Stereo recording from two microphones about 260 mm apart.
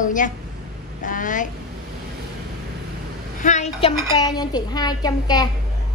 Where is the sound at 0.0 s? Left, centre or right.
Left.